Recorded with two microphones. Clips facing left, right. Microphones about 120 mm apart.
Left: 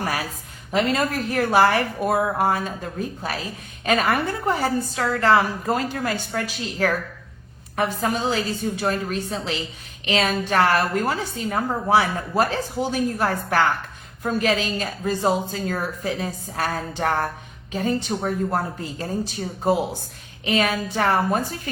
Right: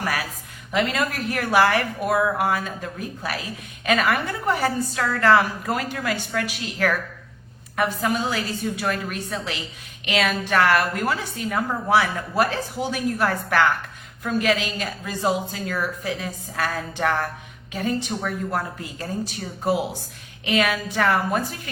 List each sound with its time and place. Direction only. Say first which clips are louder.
0.7 s a woman's voice: left 2 dB; 35° left (ahead or behind)